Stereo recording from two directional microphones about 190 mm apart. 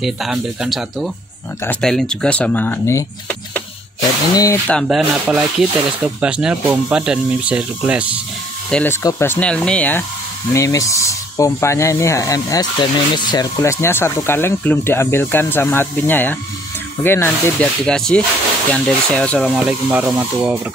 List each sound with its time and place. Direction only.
0.0 s speech: centre (ahead or behind); by 4.7 s 15° left (ahead or behind)
4.7 s speech: centre (ahead or behind)
8.6 s speech: 5° left (ahead or behind)
19.5 s speech: 5° right (ahead or behind)